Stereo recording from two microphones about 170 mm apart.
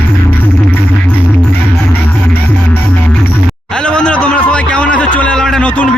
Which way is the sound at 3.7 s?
5° left (ahead or behind).